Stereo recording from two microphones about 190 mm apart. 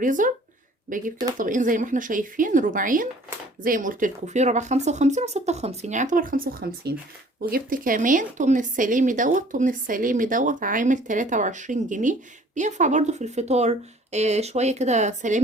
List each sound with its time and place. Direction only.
0.0 s speech: 45° right (ahead or behind)